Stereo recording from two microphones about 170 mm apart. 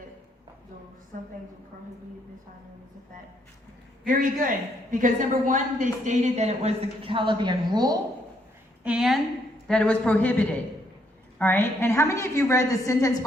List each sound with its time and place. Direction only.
1.1 s a woman's voice: 50° right (ahead or behind)
4.0 s a woman's voice: 50° right (ahead or behind); by 7.9 s 25° right (ahead or behind)
8.8 s a woman's voice: 5° right (ahead or behind); by 13.1 s 20° left (ahead or behind)